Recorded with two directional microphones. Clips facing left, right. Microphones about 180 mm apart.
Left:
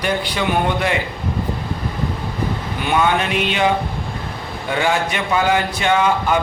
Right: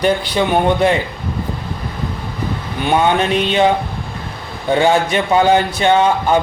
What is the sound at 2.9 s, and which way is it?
Mantra, 30° right (ahead or behind).